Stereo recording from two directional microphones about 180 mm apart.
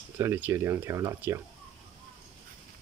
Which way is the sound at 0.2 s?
15° right (ahead or behind).